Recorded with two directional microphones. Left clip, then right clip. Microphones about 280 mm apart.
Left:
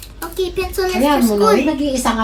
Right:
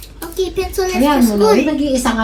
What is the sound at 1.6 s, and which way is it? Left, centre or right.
Speech, left.